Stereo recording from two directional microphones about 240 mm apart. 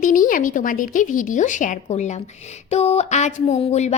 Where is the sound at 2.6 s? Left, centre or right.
Left.